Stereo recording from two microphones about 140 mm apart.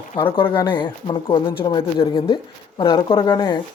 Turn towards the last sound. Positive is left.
turn(degrees=30)  # may be behind; listen again after turning